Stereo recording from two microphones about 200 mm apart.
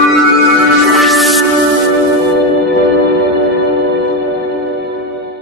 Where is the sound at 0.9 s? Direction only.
Centre (ahead or behind).